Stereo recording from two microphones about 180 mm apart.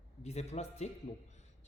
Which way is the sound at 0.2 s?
40° left (ahead or behind).